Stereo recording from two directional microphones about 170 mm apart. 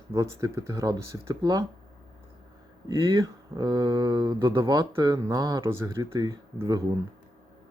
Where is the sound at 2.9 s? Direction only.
25° right (ahead or behind).